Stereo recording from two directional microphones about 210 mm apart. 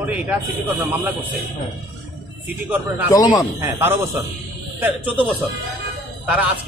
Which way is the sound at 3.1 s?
15° left (ahead or behind).